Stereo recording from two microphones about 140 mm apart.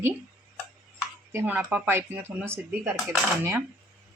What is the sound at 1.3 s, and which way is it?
A woman's voice, 15° right (ahead or behind).